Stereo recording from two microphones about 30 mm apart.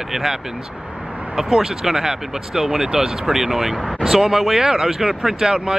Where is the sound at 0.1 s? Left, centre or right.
Centre.